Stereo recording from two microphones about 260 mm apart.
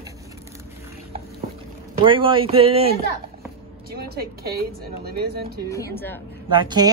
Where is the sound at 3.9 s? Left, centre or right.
Right.